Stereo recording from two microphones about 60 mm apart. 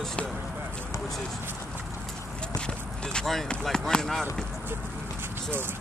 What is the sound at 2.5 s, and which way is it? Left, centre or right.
Speech, centre.